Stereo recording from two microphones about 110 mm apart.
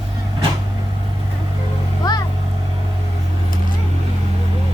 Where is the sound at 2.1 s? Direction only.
40° left (ahead or behind).